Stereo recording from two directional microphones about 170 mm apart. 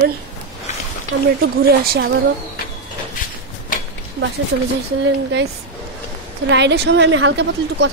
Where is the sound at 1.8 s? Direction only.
65° right (ahead or behind).